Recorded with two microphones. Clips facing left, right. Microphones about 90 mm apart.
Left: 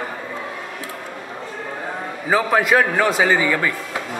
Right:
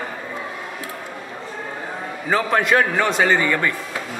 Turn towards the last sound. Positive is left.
turn(degrees=5)  # may be behind; listen again after turning